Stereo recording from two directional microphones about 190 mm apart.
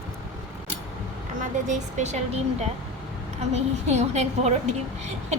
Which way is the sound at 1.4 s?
40° right (ahead or behind).